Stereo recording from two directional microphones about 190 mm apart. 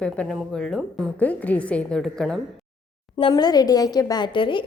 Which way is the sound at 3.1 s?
20° left (ahead or behind).